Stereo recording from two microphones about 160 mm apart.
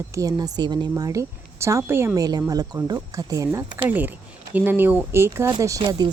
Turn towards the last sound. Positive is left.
turn(degrees=-25)  # may be behind; listen again after turning